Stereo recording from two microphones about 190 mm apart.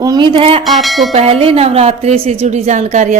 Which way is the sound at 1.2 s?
30° right (ahead or behind).